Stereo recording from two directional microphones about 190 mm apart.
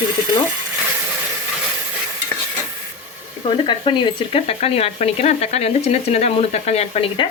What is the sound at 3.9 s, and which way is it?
Speech, 25° left (ahead or behind).